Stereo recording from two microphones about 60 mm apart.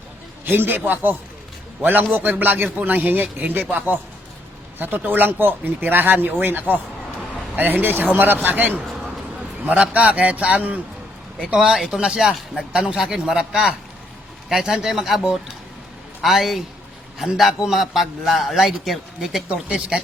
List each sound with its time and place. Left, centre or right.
0.4 s a man's voice: right
11.3 s a man's voice: centre
16.2 s a man's voice: centre
19.6 s a man's voice: right